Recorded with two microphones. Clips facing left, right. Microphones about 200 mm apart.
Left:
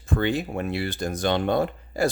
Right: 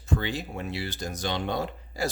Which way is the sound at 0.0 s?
55° left (ahead or behind).